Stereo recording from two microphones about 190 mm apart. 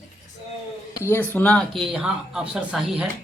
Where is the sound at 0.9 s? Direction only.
10° left (ahead or behind).